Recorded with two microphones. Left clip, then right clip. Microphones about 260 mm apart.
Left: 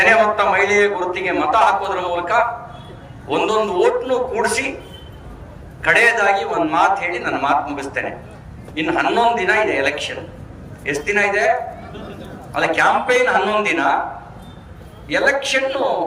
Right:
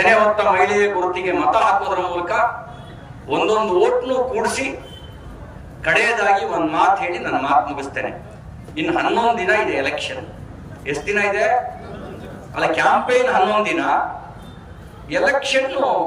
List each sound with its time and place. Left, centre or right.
0.0 s a man's voice: centre
5.8 s a man's voice: centre
12.5 s a man's voice: centre
15.1 s a man's voice: centre